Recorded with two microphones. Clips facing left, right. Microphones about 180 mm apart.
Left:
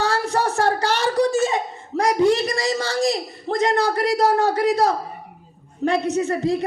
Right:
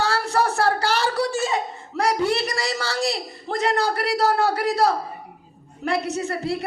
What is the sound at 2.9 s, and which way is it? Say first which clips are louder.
Speech: left 4 dB; 35° left (ahead or behind).